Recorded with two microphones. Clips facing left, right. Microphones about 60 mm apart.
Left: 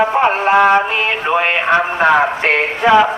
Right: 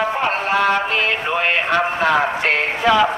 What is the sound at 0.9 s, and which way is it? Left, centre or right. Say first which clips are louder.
Speech: left 3 dB; centre.